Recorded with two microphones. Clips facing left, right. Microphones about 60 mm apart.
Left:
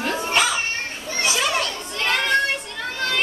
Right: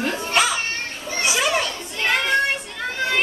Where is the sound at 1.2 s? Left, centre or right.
Centre.